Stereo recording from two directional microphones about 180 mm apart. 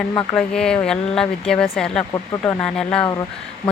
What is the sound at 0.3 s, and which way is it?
Speech, 5° left (ahead or behind).